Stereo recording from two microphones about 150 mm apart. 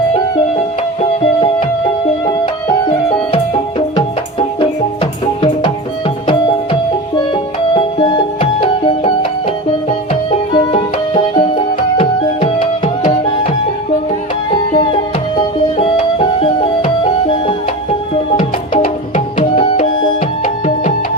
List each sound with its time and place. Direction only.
3.3 s music: 40° left (ahead or behind)
7.7 s music: 35° left (ahead or behind)
10.5 s music: 35° left (ahead or behind)
15.8 s music: 35° left (ahead or behind)
18.8 s music: 60° left (ahead or behind)